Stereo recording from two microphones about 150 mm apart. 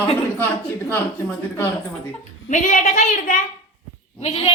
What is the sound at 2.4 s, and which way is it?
A woman's voice, 55° left (ahead or behind).